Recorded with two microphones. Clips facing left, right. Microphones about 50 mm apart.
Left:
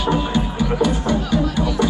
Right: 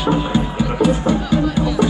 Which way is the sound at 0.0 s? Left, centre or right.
Right.